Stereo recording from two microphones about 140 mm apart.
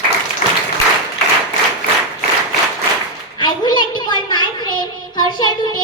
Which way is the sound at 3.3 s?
30° left (ahead or behind).